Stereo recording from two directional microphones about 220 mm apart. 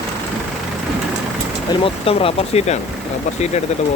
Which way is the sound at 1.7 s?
25° left (ahead or behind).